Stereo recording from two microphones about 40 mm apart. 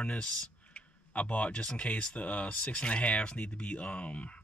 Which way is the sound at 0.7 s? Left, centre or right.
Left.